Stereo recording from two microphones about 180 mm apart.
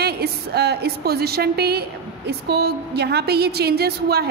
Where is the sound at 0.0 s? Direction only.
65° right (ahead or behind).